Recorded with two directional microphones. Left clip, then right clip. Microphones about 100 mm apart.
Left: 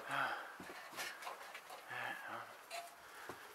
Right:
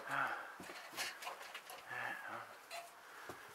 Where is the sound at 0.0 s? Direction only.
5° left (ahead or behind).